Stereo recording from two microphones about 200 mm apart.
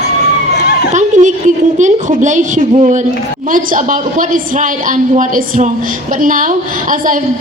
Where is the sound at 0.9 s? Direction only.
35° right (ahead or behind).